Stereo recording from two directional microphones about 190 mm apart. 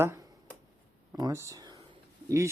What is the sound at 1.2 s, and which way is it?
Speech, 15° right (ahead or behind).